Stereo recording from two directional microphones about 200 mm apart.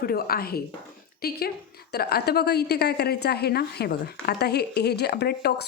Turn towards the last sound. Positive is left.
turn(degrees=55)  # may be behind; listen again after turning